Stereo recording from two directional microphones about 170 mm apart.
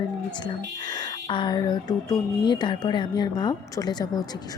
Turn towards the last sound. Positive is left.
turn(degrees=20)  # may be behind; listen again after turning